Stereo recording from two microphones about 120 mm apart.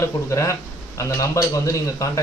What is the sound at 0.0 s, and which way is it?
Speech, 25° left (ahead or behind).